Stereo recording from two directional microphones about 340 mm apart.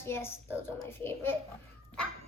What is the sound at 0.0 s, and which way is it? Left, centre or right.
A child's voice, centre.